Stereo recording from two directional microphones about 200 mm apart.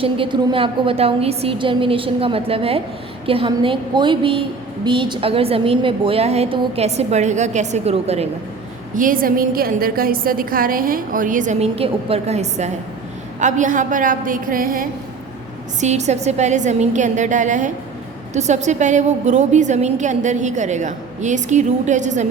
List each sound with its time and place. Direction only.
0.0 s a woman's voice: 25° right (ahead or behind)
9.0 s a woman's voice: 45° right (ahead or behind)